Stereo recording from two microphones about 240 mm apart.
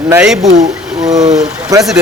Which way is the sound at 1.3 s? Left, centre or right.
Centre.